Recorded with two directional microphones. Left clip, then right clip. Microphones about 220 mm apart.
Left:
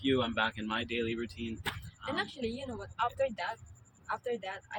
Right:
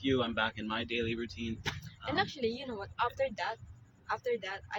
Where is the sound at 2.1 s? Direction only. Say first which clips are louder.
Right 3 dB; 15° right (ahead or behind).